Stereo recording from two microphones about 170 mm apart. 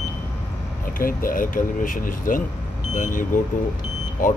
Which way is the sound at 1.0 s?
55° left (ahead or behind).